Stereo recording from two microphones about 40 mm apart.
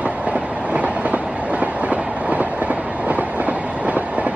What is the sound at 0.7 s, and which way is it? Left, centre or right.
Train, right.